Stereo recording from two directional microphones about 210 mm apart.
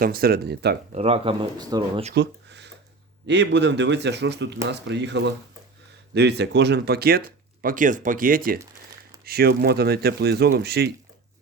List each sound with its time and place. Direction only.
0.0 s speech: 45° right (ahead or behind)
0.9 s speech: 30° right (ahead or behind)
2.1 s a sound: 55° right (ahead or behind)
3.2 s speech: 55° right (ahead or behind)